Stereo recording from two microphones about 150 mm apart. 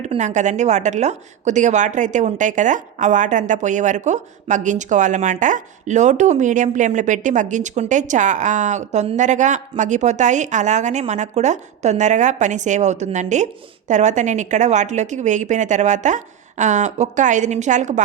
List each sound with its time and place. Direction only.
0.0 s a woman's voice: 50° right (ahead or behind)